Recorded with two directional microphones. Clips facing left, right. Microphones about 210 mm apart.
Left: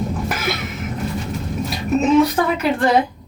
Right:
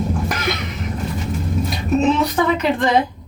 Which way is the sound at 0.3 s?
5° left (ahead or behind).